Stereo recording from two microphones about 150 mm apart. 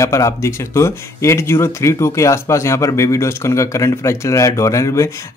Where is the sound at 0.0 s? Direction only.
20° left (ahead or behind).